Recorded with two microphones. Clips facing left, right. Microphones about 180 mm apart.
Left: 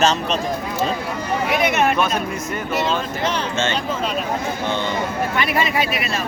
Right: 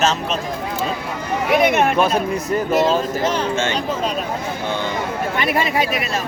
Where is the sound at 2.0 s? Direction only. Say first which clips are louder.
Right 4 dB; 30° right (ahead or behind).